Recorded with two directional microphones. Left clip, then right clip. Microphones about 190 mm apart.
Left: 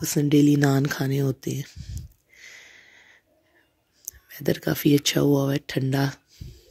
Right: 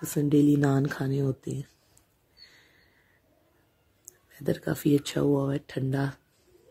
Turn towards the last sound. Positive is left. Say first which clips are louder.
# left 5 dB
turn(degrees=25)  # may be behind; listen again after turning